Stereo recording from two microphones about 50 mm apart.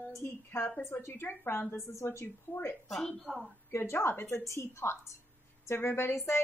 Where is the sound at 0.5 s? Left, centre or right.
Left.